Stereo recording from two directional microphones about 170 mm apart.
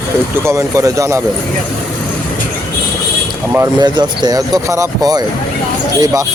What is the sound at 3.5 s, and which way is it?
Speech, 20° right (ahead or behind).